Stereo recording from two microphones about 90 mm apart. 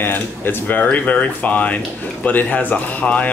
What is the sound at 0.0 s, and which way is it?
Speech, 25° left (ahead or behind).